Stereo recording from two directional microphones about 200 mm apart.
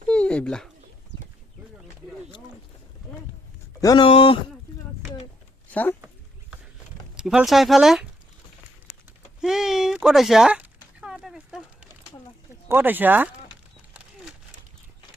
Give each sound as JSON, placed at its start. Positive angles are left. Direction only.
{"t": 0.1, "sound": "a sound", "side_deg": 5}
{"t": 3.8, "sound": "speech", "side_deg": 20}
{"t": 5.7, "sound": "speech", "side_deg": 10}
{"t": 7.2, "sound": "speech", "side_deg": -5}
{"t": 9.4, "sound": "a sound", "side_deg": 0}
{"t": 12.6, "sound": "speech", "side_deg": -10}